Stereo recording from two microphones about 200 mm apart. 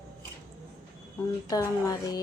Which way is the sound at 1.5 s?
20° left (ahead or behind).